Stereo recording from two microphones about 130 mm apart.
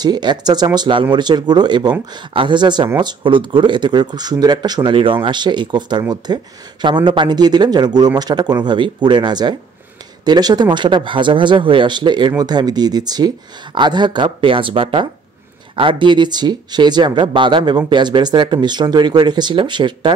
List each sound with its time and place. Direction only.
0.0 s speech: 35° right (ahead or behind)